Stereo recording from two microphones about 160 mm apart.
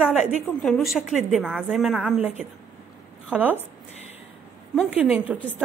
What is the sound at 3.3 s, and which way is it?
Speech, 10° right (ahead or behind).